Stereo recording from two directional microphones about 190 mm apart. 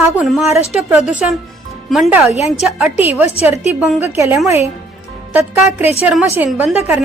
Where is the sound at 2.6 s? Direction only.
5° right (ahead or behind).